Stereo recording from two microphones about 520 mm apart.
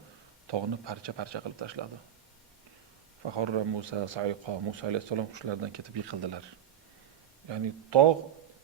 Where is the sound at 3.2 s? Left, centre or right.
Right.